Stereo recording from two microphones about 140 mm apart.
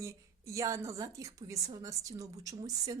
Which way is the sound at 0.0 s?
20° right (ahead or behind).